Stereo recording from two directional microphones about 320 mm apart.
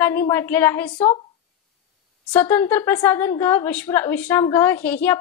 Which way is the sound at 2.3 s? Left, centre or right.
Centre.